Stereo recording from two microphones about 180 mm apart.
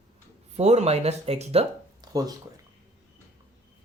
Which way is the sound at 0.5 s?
35° right (ahead or behind).